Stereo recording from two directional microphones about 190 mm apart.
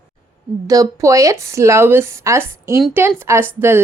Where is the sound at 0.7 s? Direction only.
15° right (ahead or behind).